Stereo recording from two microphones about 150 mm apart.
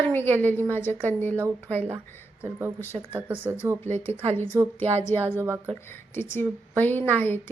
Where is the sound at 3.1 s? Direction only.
15° right (ahead or behind).